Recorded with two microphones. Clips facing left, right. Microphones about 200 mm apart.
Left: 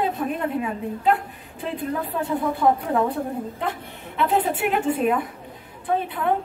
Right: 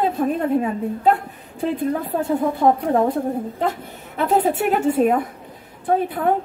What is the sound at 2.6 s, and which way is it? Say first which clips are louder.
Speech: right 3 dB; 40° right (ahead or behind).